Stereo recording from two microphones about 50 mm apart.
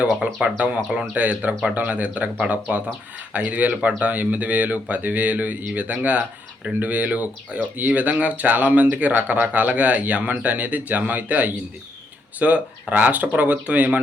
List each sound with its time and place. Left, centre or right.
0.4 s speech: right